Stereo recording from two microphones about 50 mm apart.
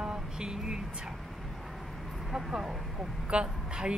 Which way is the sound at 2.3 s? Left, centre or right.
Centre.